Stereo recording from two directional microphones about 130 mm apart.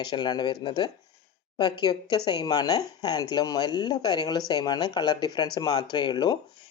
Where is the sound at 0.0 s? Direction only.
35° left (ahead or behind).